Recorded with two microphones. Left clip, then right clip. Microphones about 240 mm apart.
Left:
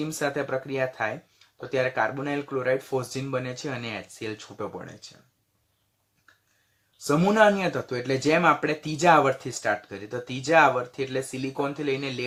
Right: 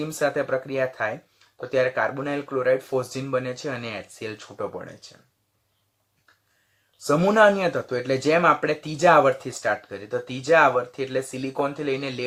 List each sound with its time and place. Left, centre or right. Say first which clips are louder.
0.0 s speech: right 4 dB; centre
7.0 s speech: right 3 dB; centre